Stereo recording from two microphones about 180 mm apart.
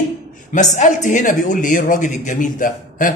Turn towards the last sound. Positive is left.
turn(degrees=50)  # may be behind; listen again after turning